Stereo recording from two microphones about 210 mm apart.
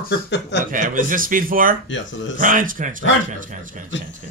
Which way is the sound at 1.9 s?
65° left (ahead or behind).